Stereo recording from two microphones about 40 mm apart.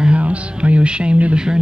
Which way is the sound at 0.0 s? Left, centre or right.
Right.